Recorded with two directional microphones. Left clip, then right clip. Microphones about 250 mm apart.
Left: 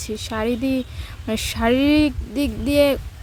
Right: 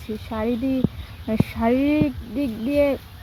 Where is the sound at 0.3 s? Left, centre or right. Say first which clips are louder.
Left 2 dB; left.